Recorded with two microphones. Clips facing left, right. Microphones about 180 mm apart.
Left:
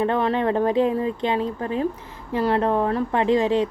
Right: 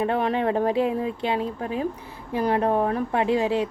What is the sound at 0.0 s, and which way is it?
A woman's voice, 10° right (ahead or behind).